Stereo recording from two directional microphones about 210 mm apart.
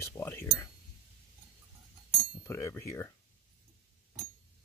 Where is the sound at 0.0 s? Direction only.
10° left (ahead or behind).